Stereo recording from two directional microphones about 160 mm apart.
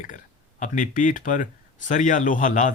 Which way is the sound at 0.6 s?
55° left (ahead or behind).